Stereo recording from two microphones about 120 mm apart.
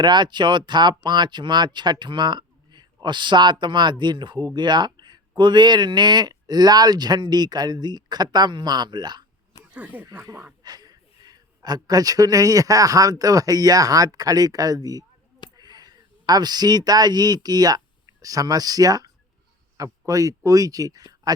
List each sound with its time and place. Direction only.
0.0 s speech: 40° right (ahead or behind)
9.7 s speech: 15° right (ahead or behind)
10.6 s speech: 35° right (ahead or behind)